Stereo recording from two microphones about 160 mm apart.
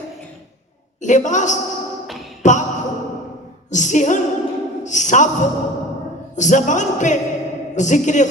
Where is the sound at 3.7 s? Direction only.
50° left (ahead or behind).